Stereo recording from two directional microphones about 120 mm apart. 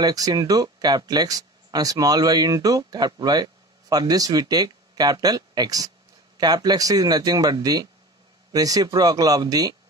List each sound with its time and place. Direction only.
0.0 s speech: 30° right (ahead or behind)